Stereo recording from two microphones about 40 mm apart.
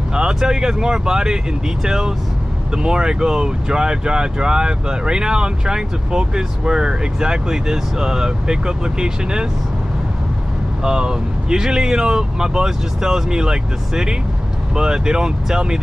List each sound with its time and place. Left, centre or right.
0.1 s speech: centre
10.8 s speech: centre